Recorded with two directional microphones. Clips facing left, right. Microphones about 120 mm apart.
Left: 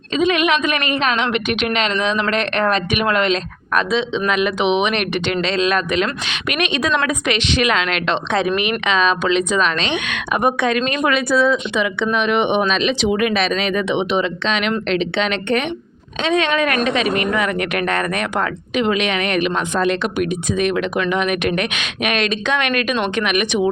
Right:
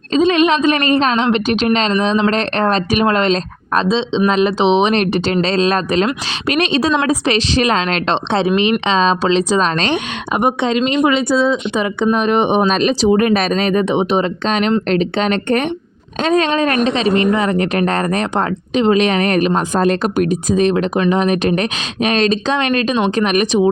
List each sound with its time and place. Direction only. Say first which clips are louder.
0.1 s a woman's voice: right 4 dB; 30° right (ahead or behind)
10.3 s speech: right 2 dB; 25° right (ahead or behind)
12.1 s a woman's voice: right 2 dB; 40° right (ahead or behind)